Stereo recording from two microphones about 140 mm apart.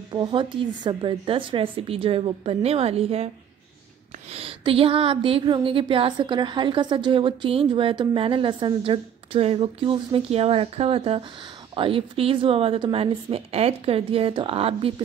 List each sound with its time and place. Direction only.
0.1 s speech: 35° right (ahead or behind)
4.3 s speech: 45° right (ahead or behind)